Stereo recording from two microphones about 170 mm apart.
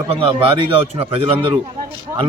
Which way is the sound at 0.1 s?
30° right (ahead or behind).